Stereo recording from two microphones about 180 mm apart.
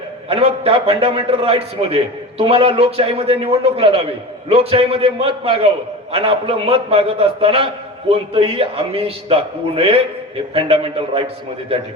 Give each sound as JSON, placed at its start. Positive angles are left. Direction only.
{"t": 0.3, "sound": "a man's voice", "side_deg": -30}